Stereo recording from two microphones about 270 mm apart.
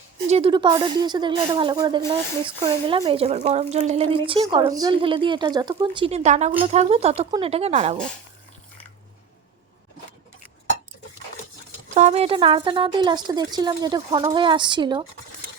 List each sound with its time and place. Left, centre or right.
0.3 s speech: right
11.9 s speech: right